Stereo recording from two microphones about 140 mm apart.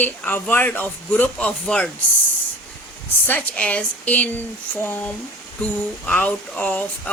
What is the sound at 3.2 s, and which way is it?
Speech, 10° left (ahead or behind).